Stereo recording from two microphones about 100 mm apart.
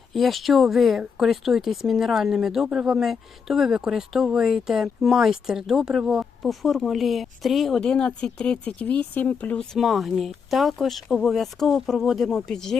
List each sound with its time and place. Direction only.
0.1 s speech: centre (ahead or behind)
7.9 s speech: 10° left (ahead or behind)
9.7 s speech: centre (ahead or behind)